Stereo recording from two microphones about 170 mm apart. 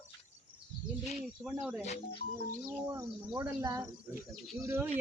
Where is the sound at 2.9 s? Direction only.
20° right (ahead or behind).